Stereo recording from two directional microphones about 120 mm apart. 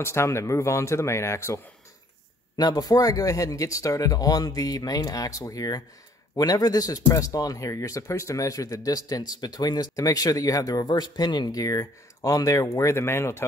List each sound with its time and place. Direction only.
0.0 s speech: 20° left (ahead or behind)
2.5 s speech: 35° left (ahead or behind)